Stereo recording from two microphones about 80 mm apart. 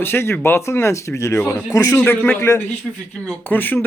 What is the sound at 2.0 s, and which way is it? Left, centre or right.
Speech, left.